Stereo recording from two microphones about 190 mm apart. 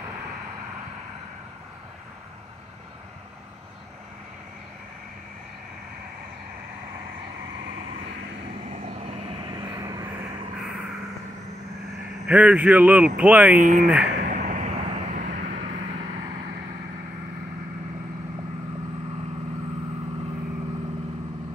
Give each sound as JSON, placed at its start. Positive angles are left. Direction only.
{"t": 8.6, "sound": "vehicle", "side_deg": -35}
{"t": 9.5, "sound": "vehicle", "side_deg": -20}
{"t": 12.3, "sound": "speech", "side_deg": -5}
{"t": 13.6, "sound": "speech", "side_deg": -45}
{"t": 14.1, "sound": "vehicle", "side_deg": -45}